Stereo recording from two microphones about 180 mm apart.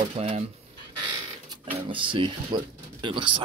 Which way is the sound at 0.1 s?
35° right (ahead or behind).